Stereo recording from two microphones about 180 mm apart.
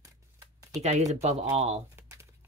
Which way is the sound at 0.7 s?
40° right (ahead or behind).